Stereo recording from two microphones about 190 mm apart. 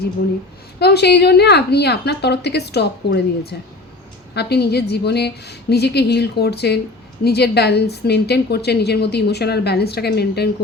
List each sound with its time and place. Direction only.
0.8 s a woman's voice: 60° left (ahead or behind)